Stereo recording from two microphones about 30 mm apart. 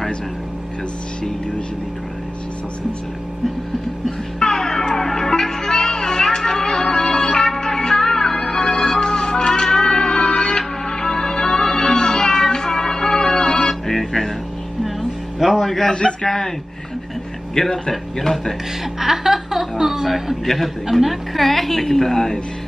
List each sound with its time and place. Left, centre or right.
4.4 s music: left
9.1 s music: left
9.5 s music: centre
13.8 s music: centre
15.0 s music: centre
15.6 s a sound: centre
15.9 s a man's voice: left
16.2 s a woman's voice: centre
17.6 s a woman's voice: centre
18.9 s music: centre
20.4 s a woman's voice: centre